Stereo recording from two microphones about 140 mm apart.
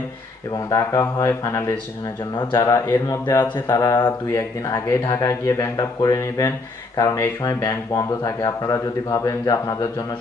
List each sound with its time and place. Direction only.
0.7 s speech: 20° left (ahead or behind)